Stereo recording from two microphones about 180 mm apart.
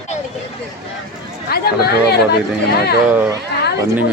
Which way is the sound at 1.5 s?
60° left (ahead or behind).